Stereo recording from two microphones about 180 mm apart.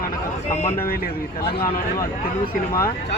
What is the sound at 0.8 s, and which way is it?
Speech, 55° left (ahead or behind).